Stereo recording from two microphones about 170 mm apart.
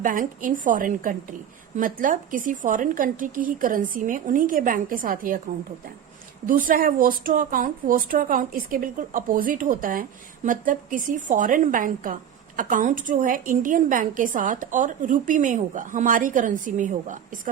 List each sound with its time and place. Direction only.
0.0 s speech: 50° right (ahead or behind)
6.4 s speech: 55° right (ahead or behind)